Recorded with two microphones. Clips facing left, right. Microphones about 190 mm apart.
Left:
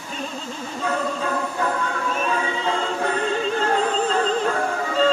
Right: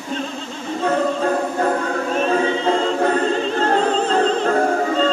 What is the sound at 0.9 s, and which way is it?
Music, 45° right (ahead or behind).